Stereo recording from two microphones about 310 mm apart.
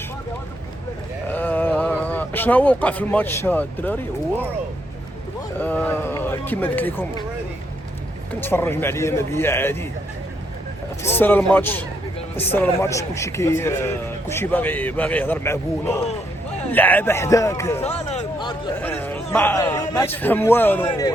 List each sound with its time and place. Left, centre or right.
1.3 s a sound: centre
5.5 s speech: centre
8.4 s a man's voice: centre
11.0 s a man's voice: centre
17.8 s a man's voice: centre